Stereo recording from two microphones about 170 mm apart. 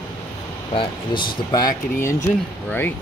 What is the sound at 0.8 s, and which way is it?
Speech, 25° left (ahead or behind).